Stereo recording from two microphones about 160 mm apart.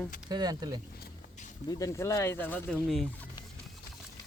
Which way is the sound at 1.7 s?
20° left (ahead or behind).